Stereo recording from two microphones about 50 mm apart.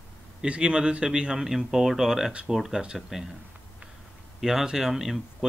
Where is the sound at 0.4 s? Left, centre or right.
Centre.